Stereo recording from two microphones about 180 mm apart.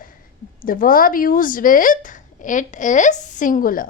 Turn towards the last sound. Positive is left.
turn(degrees=50)  # may be behind; listen again after turning